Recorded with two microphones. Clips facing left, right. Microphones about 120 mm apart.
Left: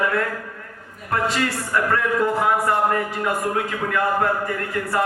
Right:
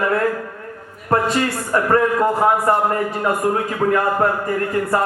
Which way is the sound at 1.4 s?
30° right (ahead or behind).